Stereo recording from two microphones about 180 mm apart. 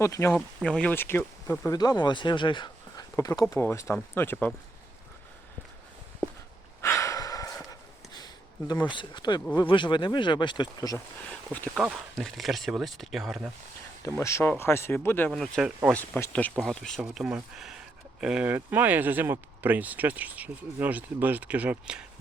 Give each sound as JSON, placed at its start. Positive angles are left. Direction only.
{"t": 0.0, "sound": "speech", "side_deg": 15}
{"t": 0.3, "sound": "speech", "side_deg": 5}
{"t": 6.8, "sound": "a sound", "side_deg": 15}
{"t": 9.6, "sound": "speech", "side_deg": 25}
{"t": 11.3, "sound": "speech", "side_deg": 10}
{"t": 14.0, "sound": "speech", "side_deg": 15}
{"t": 15.3, "sound": "speech", "side_deg": 0}